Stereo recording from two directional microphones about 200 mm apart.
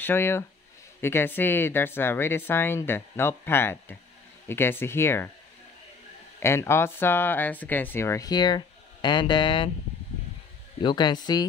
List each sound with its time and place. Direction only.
0.0 s speech: 10° left (ahead or behind)
6.4 s speech: 10° left (ahead or behind)
10.8 s speech: 20° left (ahead or behind)